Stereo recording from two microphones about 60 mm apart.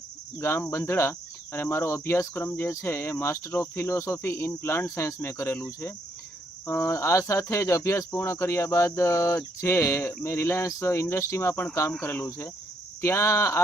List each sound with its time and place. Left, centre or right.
0.3 s speech: left
3.5 s speech: left
6.7 s speech: left
11.9 s speech: left
13.0 s speech: left